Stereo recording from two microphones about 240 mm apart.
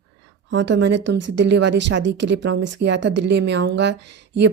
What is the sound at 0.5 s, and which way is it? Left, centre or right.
Speech, right.